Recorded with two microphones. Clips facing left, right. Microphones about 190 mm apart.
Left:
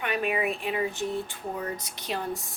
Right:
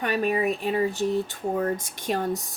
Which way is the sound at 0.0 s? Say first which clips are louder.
Right 4 dB; 40° right (ahead or behind).